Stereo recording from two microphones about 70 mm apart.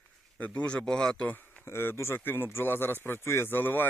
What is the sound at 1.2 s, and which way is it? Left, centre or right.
Speech, left.